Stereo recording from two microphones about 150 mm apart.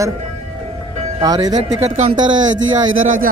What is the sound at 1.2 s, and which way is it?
Speech, 25° right (ahead or behind).